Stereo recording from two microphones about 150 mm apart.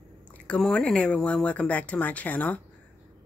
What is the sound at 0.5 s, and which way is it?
Speech, 5° left (ahead or behind).